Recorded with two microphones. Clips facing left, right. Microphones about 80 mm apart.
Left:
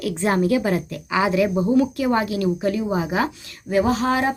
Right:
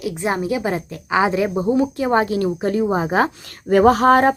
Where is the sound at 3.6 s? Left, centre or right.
Right.